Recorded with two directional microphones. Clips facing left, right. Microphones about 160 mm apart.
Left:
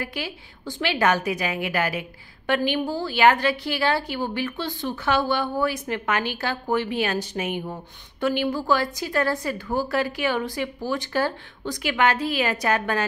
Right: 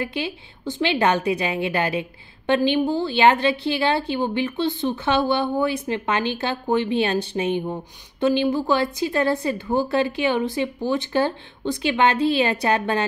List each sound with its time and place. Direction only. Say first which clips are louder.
0.0 s a woman's voice: right 4 dB; 25° right (ahead or behind)